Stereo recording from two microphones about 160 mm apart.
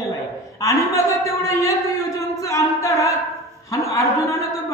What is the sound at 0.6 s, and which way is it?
Speech, 20° left (ahead or behind).